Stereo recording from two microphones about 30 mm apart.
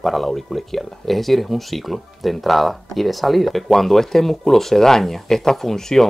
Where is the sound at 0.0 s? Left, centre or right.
Centre.